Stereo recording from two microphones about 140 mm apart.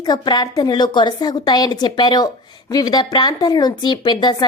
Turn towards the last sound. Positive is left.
turn(degrees=30)  # may be behind; listen again after turning